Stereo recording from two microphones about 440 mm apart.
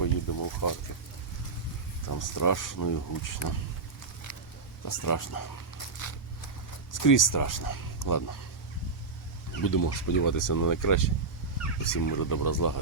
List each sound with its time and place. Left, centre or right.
0.0 s a sound: left
2.0 s speech: left
4.9 s speech: left
6.9 s speech: left
9.6 s speech: left